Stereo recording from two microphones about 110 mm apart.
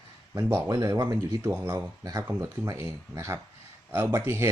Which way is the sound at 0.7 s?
30° right (ahead or behind).